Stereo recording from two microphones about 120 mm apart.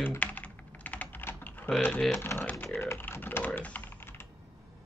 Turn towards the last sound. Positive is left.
turn(degrees=20)  # may be behind; listen again after turning